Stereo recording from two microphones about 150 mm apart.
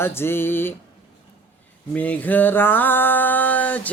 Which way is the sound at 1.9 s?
10° left (ahead or behind).